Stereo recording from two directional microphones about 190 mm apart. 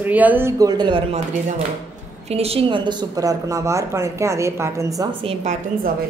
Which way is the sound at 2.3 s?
30° right (ahead or behind).